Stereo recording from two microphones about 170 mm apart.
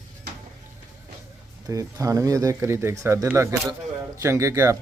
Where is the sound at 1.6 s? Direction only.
20° right (ahead or behind).